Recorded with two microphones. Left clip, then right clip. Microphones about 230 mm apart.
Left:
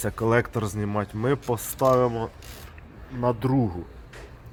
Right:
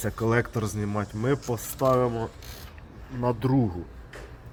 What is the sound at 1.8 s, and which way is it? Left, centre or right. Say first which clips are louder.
Speech: left 2 dB; centre.